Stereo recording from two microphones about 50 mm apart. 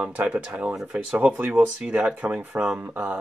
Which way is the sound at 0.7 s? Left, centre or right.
Centre.